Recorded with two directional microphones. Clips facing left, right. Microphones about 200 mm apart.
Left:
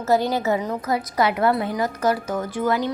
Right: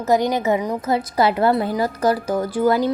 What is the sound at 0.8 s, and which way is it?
A woman's voice, 30° right (ahead or behind).